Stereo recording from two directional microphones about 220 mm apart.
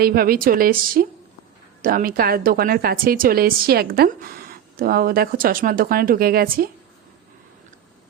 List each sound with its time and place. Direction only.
0.0 s a woman's voice: 45° right (ahead or behind)